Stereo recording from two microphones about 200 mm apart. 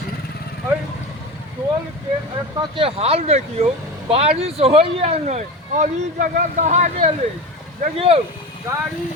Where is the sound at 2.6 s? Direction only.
25° right (ahead or behind).